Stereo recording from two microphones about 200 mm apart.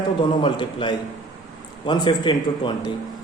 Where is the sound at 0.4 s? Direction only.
25° left (ahead or behind).